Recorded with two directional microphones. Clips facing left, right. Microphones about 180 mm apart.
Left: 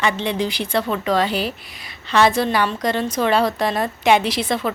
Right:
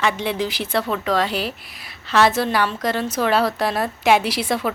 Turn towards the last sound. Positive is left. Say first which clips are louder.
# left 1 dB
turn(degrees=-10)  # may be behind; listen again after turning